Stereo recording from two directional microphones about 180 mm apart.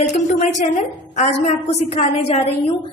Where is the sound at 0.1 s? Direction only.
40° left (ahead or behind).